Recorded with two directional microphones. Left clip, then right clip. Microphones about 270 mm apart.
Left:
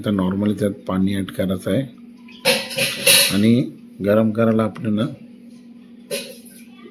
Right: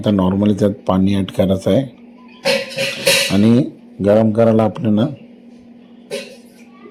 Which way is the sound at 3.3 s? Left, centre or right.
Centre.